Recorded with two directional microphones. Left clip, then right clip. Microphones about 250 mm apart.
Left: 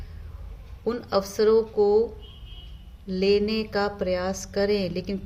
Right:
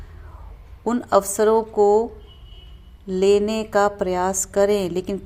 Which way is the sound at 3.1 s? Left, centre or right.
Right.